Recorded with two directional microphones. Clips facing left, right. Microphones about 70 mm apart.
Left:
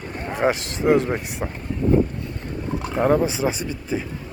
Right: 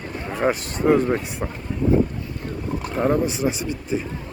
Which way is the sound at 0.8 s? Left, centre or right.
Centre.